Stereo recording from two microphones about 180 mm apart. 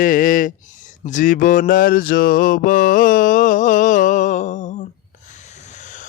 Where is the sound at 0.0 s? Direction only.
50° left (ahead or behind).